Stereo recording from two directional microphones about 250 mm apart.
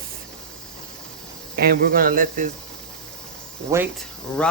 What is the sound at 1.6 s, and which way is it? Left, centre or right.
Speech, right.